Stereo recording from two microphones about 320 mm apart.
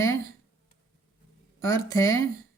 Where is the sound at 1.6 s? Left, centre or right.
Centre.